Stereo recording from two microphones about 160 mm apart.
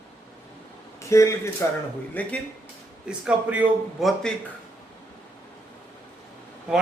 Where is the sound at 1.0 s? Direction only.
20° left (ahead or behind).